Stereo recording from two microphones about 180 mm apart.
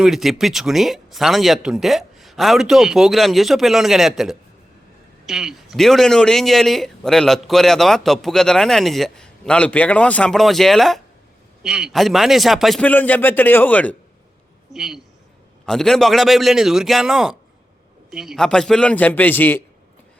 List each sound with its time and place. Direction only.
0.0 s a man's voice: centre (ahead or behind)
14.7 s a man's voice: centre (ahead or behind)